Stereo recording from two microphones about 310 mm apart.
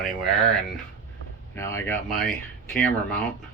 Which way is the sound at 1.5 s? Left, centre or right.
Centre.